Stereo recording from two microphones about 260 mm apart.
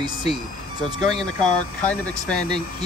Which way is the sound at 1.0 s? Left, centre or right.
Centre.